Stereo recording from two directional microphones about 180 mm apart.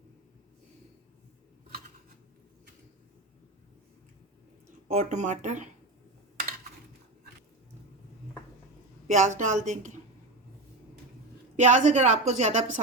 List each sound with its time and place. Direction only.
4.9 s a woman's voice: 40° right (ahead or behind)
9.0 s speech: 40° right (ahead or behind)
11.5 s a woman's voice: 40° right (ahead or behind)